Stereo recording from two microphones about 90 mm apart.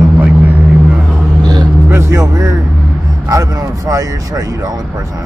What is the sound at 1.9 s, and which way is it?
Music, 30° right (ahead or behind).